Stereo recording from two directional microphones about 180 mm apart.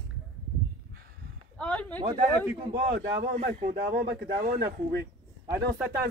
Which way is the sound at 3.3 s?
50° right (ahead or behind).